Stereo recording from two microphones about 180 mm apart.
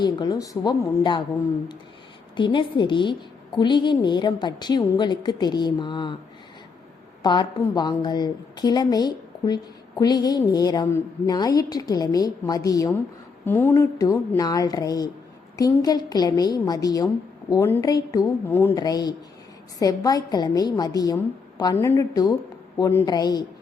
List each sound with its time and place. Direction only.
0.0 s a woman's voice: 20° left (ahead or behind)
2.3 s a woman's voice: 25° left (ahead or behind)
7.2 s a woman's voice: 25° left (ahead or behind)